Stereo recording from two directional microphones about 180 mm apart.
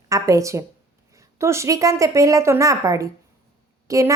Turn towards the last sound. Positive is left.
turn(degrees=-15)  # may be behind; listen again after turning